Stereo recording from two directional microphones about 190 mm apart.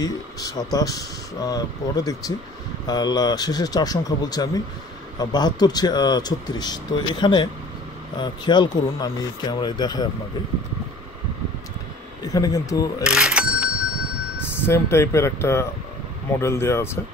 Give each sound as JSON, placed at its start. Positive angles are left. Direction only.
{"t": 0.0, "sound": "speech", "side_deg": 20}
{"t": 12.2, "sound": "speech", "side_deg": 20}
{"t": 13.0, "sound": "bicycle bell", "side_deg": -5}
{"t": 14.6, "sound": "speech", "side_deg": 15}